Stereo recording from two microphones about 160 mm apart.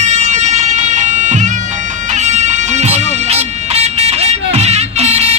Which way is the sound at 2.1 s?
45° right (ahead or behind).